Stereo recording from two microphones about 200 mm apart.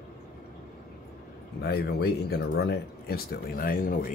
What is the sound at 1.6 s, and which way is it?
Speech, 55° left (ahead or behind).